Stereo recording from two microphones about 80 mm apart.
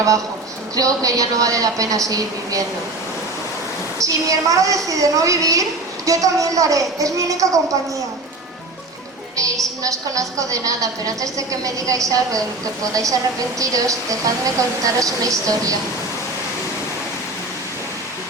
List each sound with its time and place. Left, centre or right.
0.8 s a woman's voice: right
3.9 s a woman's voice: right
9.3 s a woman's voice: right